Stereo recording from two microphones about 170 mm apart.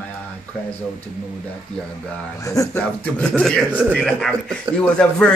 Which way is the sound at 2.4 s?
20° left (ahead or behind).